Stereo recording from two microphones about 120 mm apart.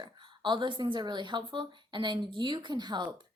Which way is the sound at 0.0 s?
40° right (ahead or behind).